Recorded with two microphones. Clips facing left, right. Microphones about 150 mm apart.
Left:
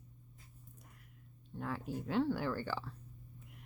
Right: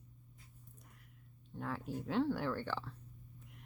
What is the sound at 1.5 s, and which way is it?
Speech, centre (ahead or behind).